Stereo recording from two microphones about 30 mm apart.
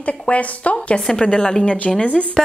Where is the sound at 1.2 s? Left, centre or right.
Left.